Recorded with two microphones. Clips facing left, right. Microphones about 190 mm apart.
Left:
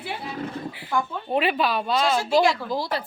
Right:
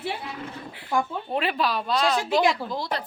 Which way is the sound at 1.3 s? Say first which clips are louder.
Left 3 dB; centre (ahead or behind).